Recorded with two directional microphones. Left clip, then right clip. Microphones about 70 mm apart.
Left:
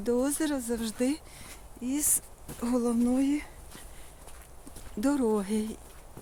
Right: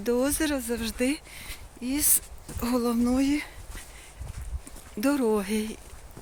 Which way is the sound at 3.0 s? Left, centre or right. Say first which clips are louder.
Right 2 dB; centre.